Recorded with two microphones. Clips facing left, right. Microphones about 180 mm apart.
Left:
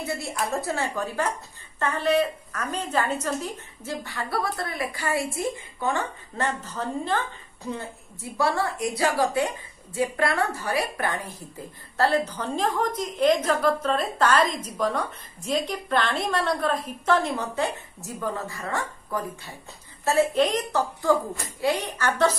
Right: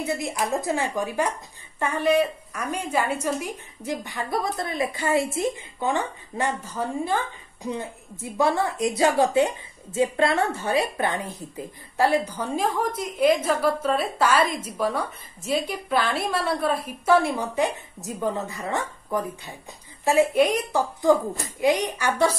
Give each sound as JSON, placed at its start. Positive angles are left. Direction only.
{"t": 0.0, "sound": "a woman's voice", "side_deg": -15}